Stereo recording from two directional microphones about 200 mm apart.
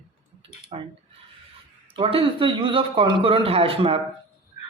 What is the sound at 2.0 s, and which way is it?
A man's voice, 25° right (ahead or behind).